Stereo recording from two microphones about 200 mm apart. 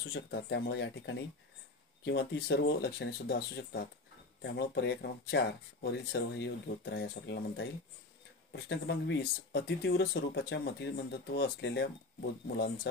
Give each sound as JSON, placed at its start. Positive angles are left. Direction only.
{"t": 0.1, "sound": "speech", "side_deg": 55}